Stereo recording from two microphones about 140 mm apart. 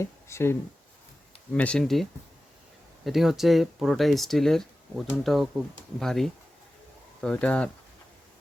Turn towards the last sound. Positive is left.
turn(degrees=10)  # may be behind; listen again after turning